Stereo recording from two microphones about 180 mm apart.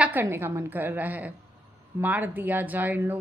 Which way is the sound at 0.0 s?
10° right (ahead or behind).